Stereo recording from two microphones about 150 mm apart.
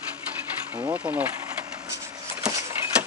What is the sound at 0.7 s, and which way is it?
Speech, 15° right (ahead or behind).